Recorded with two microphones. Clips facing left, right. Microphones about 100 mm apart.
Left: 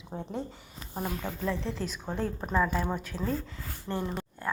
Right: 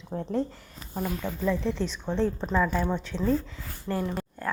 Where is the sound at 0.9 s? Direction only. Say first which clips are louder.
Right 3 dB; 20° left (ahead or behind).